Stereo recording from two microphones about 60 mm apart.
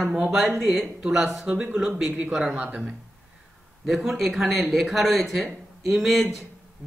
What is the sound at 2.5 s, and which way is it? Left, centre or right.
Speech, right.